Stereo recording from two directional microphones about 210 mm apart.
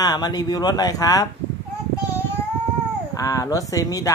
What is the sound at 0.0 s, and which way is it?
Speech, 20° left (ahead or behind).